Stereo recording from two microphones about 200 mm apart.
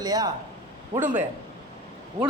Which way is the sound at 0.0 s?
20° right (ahead or behind).